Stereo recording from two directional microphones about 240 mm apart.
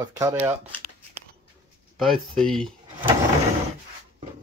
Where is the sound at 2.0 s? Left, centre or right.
Centre.